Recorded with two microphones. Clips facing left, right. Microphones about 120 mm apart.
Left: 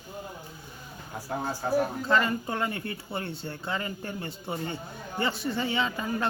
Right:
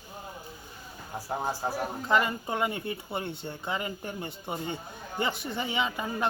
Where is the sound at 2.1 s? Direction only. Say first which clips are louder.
Left 1 dB; 15° right (ahead or behind).